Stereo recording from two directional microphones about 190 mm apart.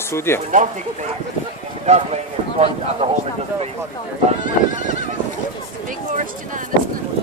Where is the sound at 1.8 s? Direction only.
35° right (ahead or behind).